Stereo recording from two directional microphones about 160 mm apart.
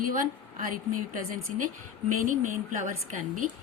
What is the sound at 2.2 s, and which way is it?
Speech, 55° right (ahead or behind).